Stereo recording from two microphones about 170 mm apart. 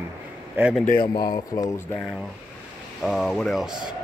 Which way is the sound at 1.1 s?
25° left (ahead or behind).